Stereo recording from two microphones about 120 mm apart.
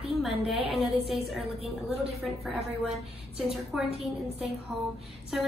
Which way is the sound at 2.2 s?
Centre (ahead or behind).